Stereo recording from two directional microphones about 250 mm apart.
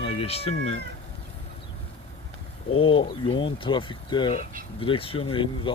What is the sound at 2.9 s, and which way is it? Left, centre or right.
Speech, left.